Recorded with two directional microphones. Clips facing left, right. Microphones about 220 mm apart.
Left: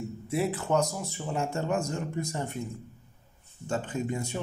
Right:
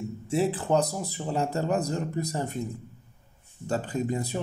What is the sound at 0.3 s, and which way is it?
Speech, 30° right (ahead or behind).